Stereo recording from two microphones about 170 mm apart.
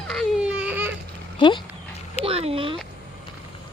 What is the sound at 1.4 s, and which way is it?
Speech, 30° left (ahead or behind).